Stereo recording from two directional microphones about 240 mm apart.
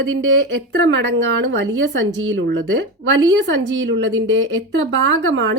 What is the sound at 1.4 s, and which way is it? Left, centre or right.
Speech, right.